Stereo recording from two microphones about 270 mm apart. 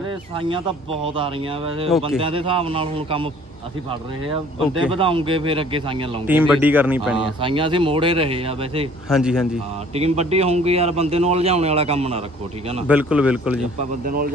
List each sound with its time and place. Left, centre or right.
1.0 s a man's voice: centre
4.9 s a man's voice: centre
6.2 s speech: centre
7.4 s a man's voice: centre
9.1 s a man's voice: centre
9.9 s a man's voice: right
12.8 s a man's voice: centre
14.0 s speech: right